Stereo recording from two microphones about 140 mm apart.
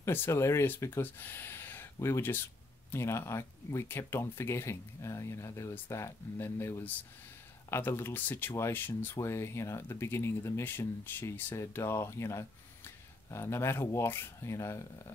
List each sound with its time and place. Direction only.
0.0 s speech: 15° left (ahead or behind)